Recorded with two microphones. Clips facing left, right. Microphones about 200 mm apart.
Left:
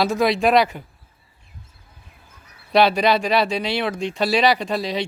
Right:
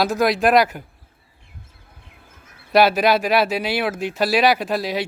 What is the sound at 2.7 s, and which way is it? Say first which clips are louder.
Speech: right 1 dB; 5° right (ahead or behind).